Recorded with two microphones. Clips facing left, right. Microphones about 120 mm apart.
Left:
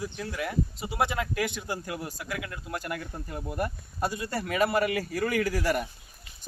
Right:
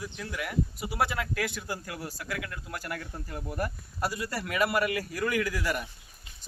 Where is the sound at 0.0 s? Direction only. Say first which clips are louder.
Left 3 dB; 25° left (ahead or behind).